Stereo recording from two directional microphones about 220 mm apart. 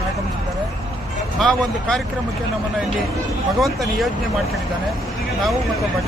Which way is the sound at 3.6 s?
Centre (ahead or behind).